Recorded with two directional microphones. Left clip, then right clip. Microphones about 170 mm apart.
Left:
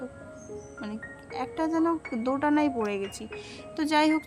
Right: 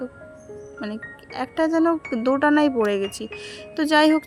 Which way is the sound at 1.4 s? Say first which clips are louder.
Right 7 dB; 30° right (ahead or behind).